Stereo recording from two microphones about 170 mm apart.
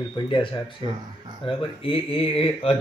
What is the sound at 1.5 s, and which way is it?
Speech, 30° left (ahead or behind).